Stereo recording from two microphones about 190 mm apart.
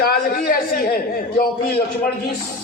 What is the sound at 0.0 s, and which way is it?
A man's voice, 50° left (ahead or behind).